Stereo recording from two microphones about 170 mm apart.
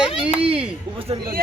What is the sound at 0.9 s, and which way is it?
Speech, 35° right (ahead or behind).